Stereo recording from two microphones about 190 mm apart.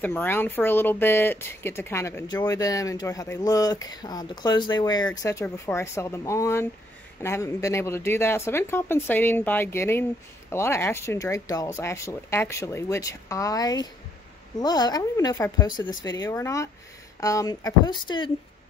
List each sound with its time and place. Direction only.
0.0 s speech: 10° left (ahead or behind)